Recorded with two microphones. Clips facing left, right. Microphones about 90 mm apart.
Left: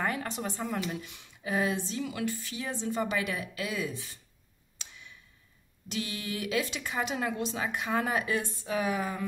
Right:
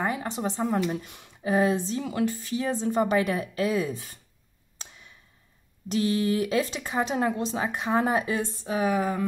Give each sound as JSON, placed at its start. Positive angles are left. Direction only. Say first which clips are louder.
{"t": 0.0, "sound": "speech", "louder": "right 4 dB", "side_deg": -20}
{"t": 0.9, "sound": "speech", "louder": "right 5 dB", "side_deg": -40}
{"t": 4.7, "sound": "a sound", "louder": "right 2 dB", "side_deg": -40}
{"t": 5.9, "sound": "speech", "louder": "right 11 dB", "side_deg": -40}